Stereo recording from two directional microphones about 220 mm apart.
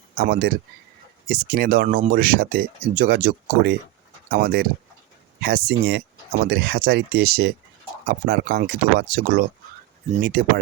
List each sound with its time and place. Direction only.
0.2 s speech: 45° right (ahead or behind)